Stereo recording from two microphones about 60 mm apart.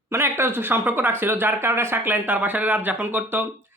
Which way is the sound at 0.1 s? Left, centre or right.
Right.